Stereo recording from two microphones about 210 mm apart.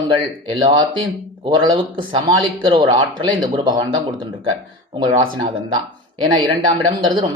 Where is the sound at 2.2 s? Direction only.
20° right (ahead or behind).